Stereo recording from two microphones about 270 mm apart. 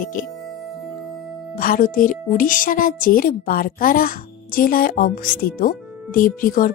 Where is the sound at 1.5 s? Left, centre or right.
Left.